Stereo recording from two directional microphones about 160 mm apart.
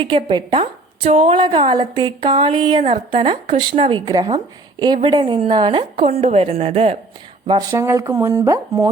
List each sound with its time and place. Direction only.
0.0 s a woman's voice: 30° right (ahead or behind)
7.7 s speech: 20° right (ahead or behind)